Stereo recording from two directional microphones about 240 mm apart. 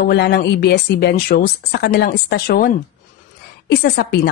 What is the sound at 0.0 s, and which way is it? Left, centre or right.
A woman's voice, left.